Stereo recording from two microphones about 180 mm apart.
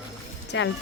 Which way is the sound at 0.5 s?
85° left.